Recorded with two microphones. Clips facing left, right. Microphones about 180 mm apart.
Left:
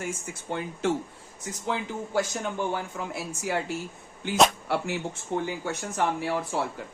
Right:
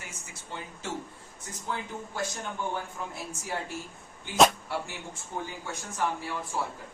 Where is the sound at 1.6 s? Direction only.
90° left.